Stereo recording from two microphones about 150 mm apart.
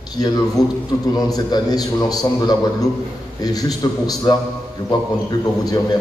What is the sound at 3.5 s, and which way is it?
Speech, 25° left (ahead or behind).